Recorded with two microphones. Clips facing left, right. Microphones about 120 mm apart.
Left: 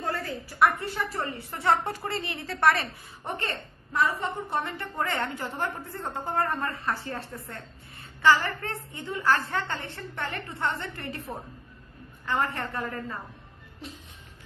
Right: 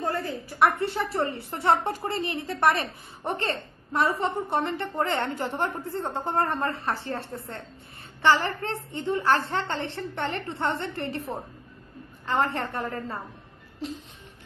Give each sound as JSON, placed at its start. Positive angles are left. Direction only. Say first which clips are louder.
{"t": 0.0, "sound": "a woman's voice", "louder": "right 3 dB", "side_deg": -15}
{"t": 0.7, "sound": "a woman's voice", "louder": "right 5 dB", "side_deg": -30}
{"t": 3.3, "sound": "a woman's voice", "louder": "right 4 dB", "side_deg": -30}